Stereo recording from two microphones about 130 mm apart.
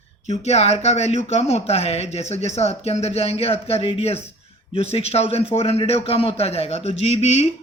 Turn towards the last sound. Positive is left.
turn(degrees=55)  # may be behind; listen again after turning